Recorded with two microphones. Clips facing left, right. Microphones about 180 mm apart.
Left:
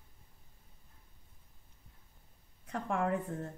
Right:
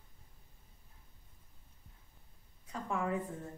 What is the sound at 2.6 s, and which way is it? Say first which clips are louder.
Speech: left 3 dB; 65° left (ahead or behind).